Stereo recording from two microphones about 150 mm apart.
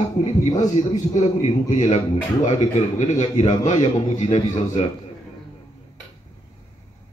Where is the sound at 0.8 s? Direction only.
45° left (ahead or behind).